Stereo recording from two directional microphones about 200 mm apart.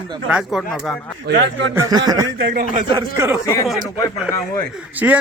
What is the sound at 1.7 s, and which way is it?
Speech, 15° right (ahead or behind).